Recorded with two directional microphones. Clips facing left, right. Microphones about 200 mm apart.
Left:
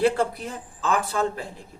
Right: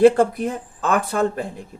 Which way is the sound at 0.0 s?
50° right (ahead or behind).